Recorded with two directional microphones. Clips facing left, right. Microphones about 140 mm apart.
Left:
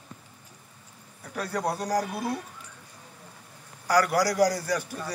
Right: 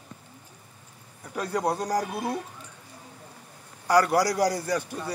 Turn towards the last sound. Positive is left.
turn(degrees=-25)  # may be behind; listen again after turning